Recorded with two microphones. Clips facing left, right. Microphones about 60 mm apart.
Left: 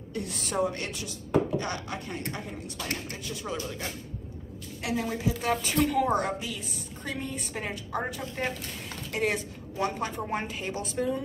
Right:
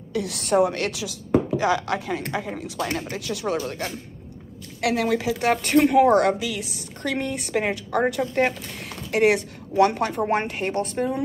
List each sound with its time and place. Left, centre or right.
0.1 s speech: right
3.6 s a woman's voice: right
4.8 s a woman's voice: right